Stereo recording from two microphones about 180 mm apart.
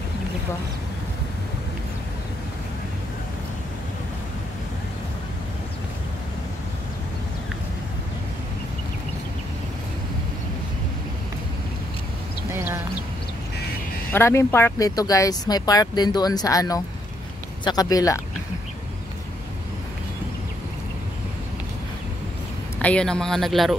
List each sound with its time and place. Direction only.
14.1 s speech: 15° left (ahead or behind)
22.8 s speech: 5° left (ahead or behind)